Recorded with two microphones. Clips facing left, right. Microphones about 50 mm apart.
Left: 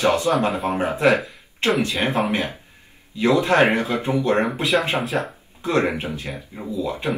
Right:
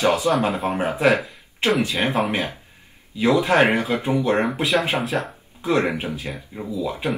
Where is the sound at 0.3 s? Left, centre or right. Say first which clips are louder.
Even; centre.